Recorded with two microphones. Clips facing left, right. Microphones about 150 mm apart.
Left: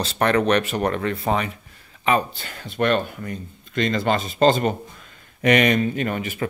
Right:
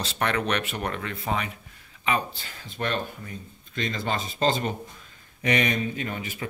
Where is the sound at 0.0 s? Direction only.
40° left (ahead or behind).